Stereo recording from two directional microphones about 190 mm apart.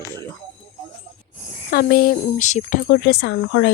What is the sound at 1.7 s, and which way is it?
Speech, 55° left (ahead or behind).